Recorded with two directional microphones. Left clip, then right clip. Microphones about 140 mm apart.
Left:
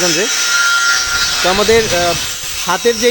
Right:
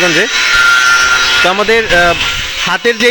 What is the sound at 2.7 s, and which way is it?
Speech, 20° left (ahead or behind).